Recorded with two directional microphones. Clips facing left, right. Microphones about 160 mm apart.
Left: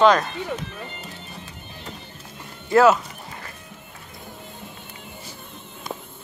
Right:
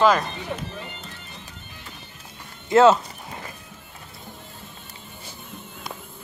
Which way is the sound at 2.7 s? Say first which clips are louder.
Right 1 dB; 25° right (ahead or behind).